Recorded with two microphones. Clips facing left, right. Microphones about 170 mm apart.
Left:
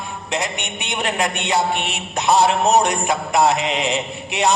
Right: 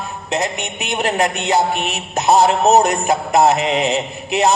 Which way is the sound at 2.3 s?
20° right (ahead or behind).